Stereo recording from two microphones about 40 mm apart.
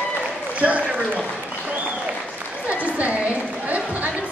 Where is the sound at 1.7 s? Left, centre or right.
Right.